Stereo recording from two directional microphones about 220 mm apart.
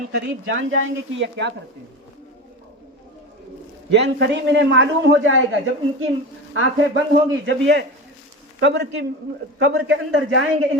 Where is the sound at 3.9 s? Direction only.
50° right (ahead or behind).